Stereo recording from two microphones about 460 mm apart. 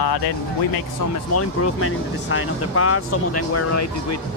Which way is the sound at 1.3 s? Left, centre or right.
Left.